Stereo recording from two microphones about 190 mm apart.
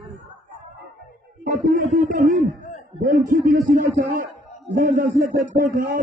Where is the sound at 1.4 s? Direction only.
45° right (ahead or behind).